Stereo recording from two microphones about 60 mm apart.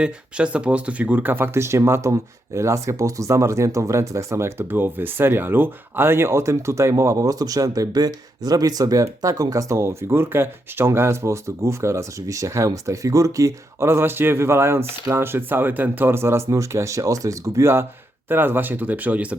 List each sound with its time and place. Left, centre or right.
0.0 s speech: centre; by 1.5 s right
1.5 s speech: right
16.5 s speech: right
18.3 s speech: right